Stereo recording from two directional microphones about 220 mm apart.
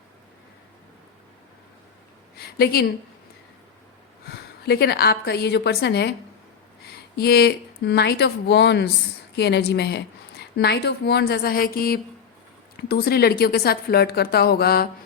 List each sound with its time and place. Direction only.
4.3 s a woman's voice: 45° left (ahead or behind)